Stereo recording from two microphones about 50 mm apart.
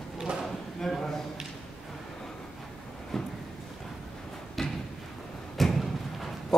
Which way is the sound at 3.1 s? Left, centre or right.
Centre.